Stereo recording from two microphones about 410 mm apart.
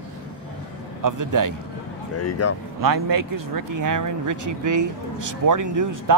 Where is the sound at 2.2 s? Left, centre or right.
Left.